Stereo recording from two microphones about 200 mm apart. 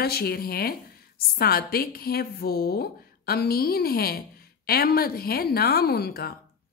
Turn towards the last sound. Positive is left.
turn(degrees=50)  # may be behind; listen again after turning